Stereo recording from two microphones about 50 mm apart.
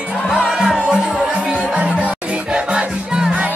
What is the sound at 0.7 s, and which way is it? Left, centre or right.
Music, centre.